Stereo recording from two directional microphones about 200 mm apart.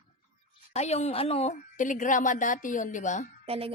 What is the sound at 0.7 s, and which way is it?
A woman's voice, 35° left (ahead or behind).